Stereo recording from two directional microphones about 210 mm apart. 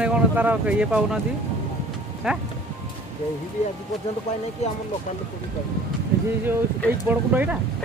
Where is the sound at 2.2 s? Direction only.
5° right (ahead or behind).